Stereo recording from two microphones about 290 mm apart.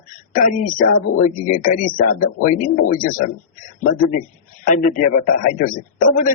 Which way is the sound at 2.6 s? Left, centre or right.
Left.